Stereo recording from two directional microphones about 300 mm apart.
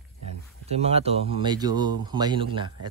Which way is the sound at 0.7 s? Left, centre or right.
Right.